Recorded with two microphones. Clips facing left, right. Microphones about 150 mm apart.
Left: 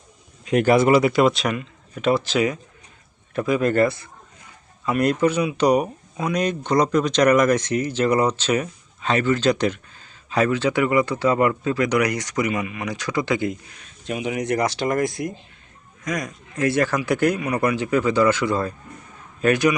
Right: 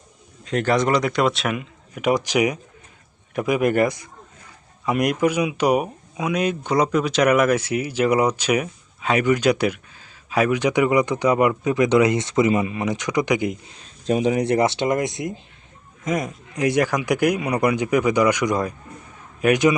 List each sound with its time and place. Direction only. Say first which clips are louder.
0.4 s speech: left 4 dB; 10° left (ahead or behind)
1.5 s speech: even; 10° right (ahead or behind)
14.0 s speech: right 6 dB; 35° right (ahead or behind); by 19.7 s 15° right (ahead or behind)